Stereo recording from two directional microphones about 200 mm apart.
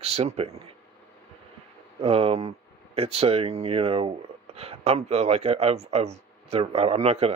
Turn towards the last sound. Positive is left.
turn(degrees=-30)  # may be behind; listen again after turning